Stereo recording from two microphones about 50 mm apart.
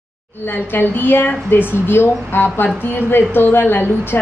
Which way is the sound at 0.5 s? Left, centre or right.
Left.